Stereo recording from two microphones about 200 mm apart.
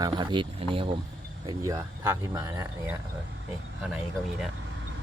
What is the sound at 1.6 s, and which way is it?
Speech, 10° right (ahead or behind).